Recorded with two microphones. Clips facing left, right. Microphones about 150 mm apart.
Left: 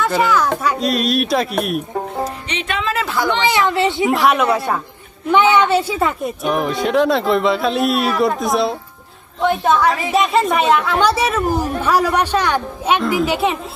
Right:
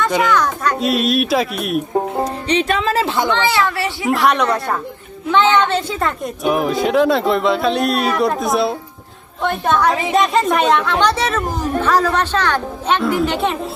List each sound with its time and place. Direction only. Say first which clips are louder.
0.0 s speech: even; 5° left (ahead or behind)
2.5 s a woman's voice: right 6 dB; 35° right (ahead or behind)
3.3 s speech: left 1 dB; 15° left (ahead or behind)
4.0 s speech: right 1 dB; centre (ahead or behind)